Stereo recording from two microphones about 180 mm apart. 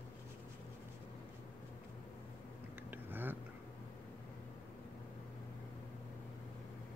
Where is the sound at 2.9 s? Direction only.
10° right (ahead or behind).